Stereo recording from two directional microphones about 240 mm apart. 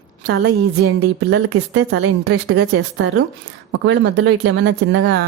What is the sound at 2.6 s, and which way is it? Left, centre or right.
A woman's voice, right.